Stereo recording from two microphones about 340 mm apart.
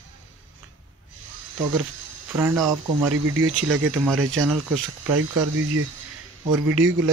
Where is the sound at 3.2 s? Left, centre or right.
Right.